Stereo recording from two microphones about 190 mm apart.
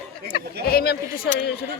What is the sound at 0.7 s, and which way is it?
Speech, 55° left (ahead or behind).